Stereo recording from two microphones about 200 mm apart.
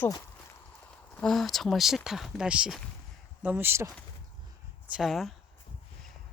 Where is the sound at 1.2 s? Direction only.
Centre (ahead or behind).